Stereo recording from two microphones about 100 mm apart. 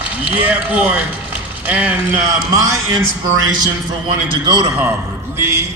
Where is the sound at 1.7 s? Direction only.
15° right (ahead or behind).